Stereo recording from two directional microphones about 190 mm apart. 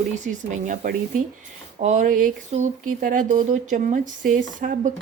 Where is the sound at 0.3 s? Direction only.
40° right (ahead or behind).